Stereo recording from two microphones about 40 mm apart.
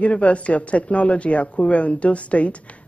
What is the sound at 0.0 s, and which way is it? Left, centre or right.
Speech, left.